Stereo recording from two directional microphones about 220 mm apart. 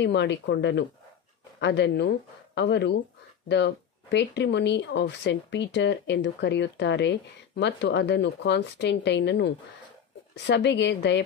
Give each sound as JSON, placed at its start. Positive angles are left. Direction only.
{"t": 0.0, "sound": "speech", "side_deg": 50}